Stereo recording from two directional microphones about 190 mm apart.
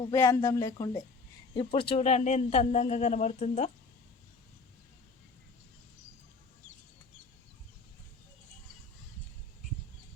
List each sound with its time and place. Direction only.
0.1 s speech: 15° left (ahead or behind); by 3.7 s 35° left (ahead or behind)